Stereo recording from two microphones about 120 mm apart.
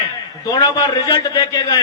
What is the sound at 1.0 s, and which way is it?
Speech, 40° left (ahead or behind).